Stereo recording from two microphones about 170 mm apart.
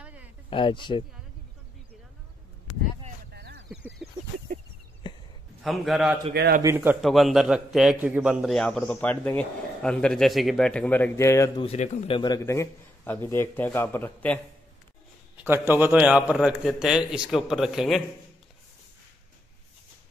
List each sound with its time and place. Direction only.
0.0 s a sound: 10° right (ahead or behind)
0.5 s speech: 30° left (ahead or behind)
3.3 s a sound: 80° right
5.6 s a man's voice: centre (ahead or behind)
6.3 s a man's voice: 75° right (ahead or behind)
6.6 s a man's voice: 15° right (ahead or behind)
7.0 s a man's voice: centre (ahead or behind); by 11.6 s 15° left (ahead or behind)
11.6 s speech: 40° left (ahead or behind)
12.2 s a man's voice: 20° left (ahead or behind)
15.4 s a man's voice: 15° right (ahead or behind)